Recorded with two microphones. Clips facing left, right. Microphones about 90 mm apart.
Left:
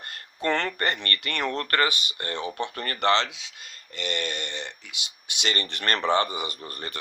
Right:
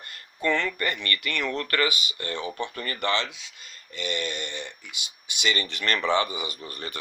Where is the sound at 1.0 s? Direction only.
45° left (ahead or behind).